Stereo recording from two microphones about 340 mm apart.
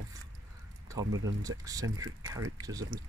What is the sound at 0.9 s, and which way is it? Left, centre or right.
Speech, centre.